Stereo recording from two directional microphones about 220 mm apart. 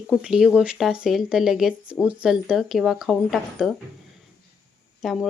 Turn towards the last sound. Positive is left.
turn(degrees=0)  # may be behind; listen again after turning